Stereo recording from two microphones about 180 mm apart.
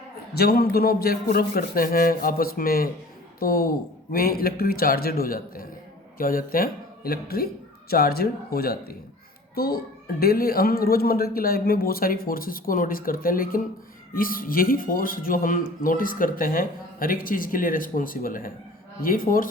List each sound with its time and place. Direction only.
0.3 s a woman's voice: 60° left (ahead or behind)